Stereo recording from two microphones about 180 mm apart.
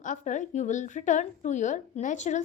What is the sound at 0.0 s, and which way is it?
A woman's voice, 45° left (ahead or behind).